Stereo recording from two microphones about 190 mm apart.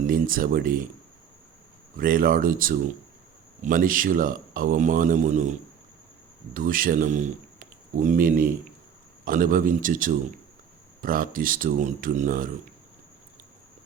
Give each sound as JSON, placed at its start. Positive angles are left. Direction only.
{"t": 0.1, "sound": "a man's voice", "side_deg": -50}
{"t": 2.0, "sound": "a man's voice", "side_deg": -50}